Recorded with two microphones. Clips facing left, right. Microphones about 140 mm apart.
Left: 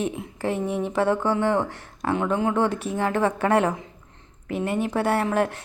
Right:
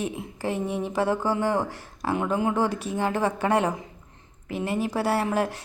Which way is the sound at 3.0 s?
30° right (ahead or behind).